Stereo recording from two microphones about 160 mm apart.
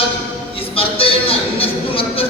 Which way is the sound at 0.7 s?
35° left (ahead or behind).